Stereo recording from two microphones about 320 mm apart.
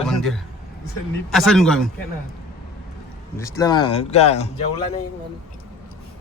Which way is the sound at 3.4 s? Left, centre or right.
Centre.